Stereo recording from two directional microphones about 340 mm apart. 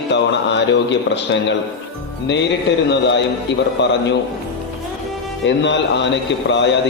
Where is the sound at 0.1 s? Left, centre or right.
Left.